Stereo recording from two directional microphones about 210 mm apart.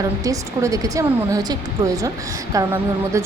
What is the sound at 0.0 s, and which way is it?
Speech, 15° right (ahead or behind).